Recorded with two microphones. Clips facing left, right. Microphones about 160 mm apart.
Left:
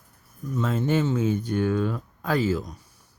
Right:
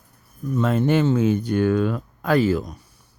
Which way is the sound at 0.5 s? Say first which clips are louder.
Right 5 dB; 65° right (ahead or behind).